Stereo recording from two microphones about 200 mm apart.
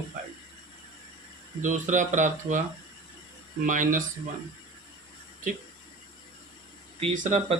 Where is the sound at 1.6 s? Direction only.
40° right (ahead or behind).